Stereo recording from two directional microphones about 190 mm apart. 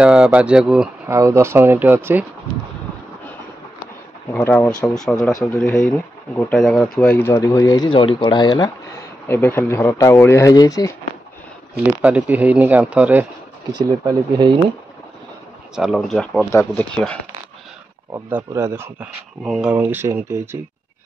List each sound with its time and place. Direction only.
0.0 s speech: 5° right (ahead or behind)
1.1 s speech: 15° right (ahead or behind)
4.3 s speech: 5° left (ahead or behind); by 8.7 s 20° left (ahead or behind)
9.3 s speech: 10° left (ahead or behind)
12.0 s speech: 10° right (ahead or behind)
13.7 s speech: 25° right (ahead or behind)
15.7 s speech: centre (ahead or behind)
18.1 s speech: 15° right (ahead or behind)